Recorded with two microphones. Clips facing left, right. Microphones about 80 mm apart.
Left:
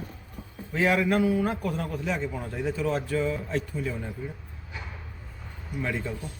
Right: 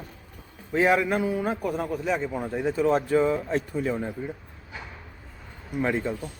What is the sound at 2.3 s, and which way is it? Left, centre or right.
Speech, right.